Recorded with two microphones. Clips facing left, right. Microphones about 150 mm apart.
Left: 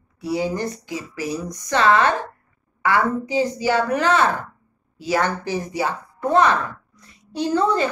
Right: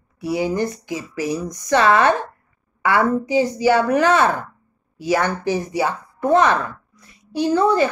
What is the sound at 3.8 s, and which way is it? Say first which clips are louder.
Speech: even; 15° right (ahead or behind).